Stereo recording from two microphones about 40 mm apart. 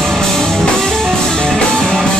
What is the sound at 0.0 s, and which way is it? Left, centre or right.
Music, centre.